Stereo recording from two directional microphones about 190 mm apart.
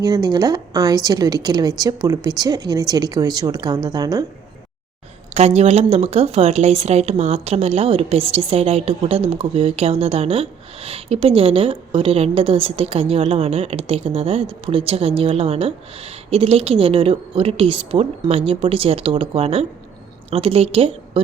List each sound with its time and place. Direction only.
0.0 s speech: 20° right (ahead or behind)
5.3 s speech: 35° right (ahead or behind)